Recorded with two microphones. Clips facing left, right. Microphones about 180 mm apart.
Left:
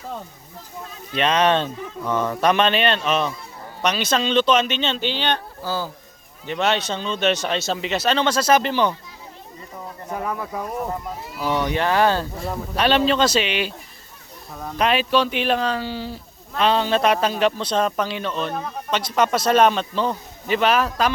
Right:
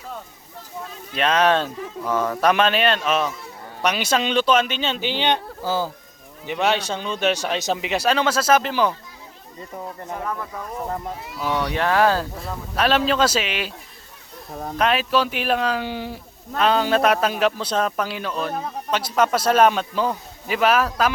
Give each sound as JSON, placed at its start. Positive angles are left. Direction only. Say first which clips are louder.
{"t": 1.1, "sound": "speech", "louder": "even", "side_deg": -5}
{"t": 10.2, "sound": "speech", "louder": "left 4 dB", "side_deg": 15}
{"t": 11.3, "sound": "speech", "louder": "left 1 dB", "side_deg": 0}
{"t": 14.8, "sound": "speech", "louder": "left 1 dB", "side_deg": 0}
{"t": 15.8, "sound": "speech", "louder": "even", "side_deg": -15}
{"t": 16.6, "sound": "speech", "louder": "even", "side_deg": -5}